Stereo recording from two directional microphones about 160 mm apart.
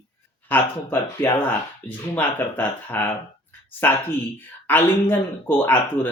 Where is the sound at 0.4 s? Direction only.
10° left (ahead or behind).